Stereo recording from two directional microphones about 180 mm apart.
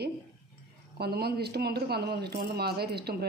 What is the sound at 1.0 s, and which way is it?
Speech, 60° right (ahead or behind).